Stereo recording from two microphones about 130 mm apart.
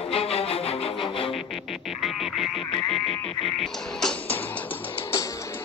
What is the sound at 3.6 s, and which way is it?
Music, 5° left (ahead or behind).